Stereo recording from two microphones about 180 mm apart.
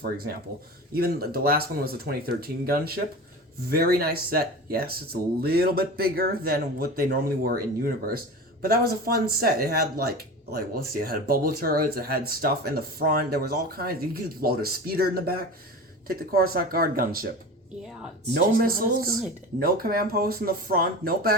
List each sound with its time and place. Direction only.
0.9 s speech: 55° right (ahead or behind)
18.3 s speech: 55° right (ahead or behind)